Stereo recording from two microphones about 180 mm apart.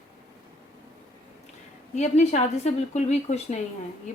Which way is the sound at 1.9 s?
40° left (ahead or behind).